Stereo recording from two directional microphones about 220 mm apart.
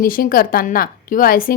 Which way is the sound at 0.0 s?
40° left (ahead or behind).